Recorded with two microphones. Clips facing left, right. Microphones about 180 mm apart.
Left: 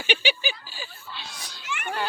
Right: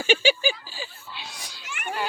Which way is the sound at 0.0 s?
45° right (ahead or behind).